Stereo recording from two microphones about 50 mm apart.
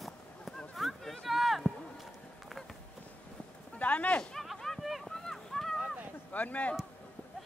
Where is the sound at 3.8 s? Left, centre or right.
Left.